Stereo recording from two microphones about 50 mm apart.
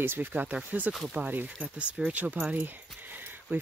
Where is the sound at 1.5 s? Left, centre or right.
Right.